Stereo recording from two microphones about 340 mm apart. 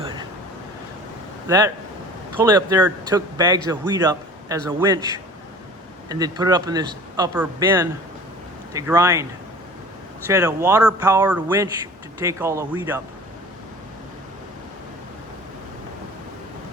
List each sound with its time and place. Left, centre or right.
0.0 s vehicle: centre
1.5 s speech: centre
10.2 s speech: centre